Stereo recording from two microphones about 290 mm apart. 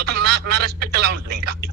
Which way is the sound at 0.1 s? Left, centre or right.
Right.